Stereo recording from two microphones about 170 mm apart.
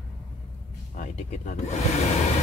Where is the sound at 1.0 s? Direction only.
45° left (ahead or behind).